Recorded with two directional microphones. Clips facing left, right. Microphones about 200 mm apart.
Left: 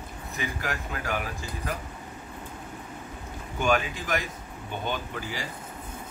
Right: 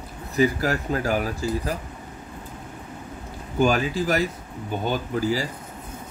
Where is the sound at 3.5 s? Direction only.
35° right (ahead or behind).